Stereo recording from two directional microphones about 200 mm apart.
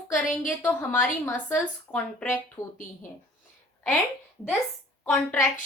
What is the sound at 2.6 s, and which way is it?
Speech, 20° left (ahead or behind).